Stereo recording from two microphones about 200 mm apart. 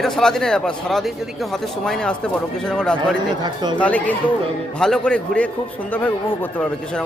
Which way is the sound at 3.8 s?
5° left (ahead or behind).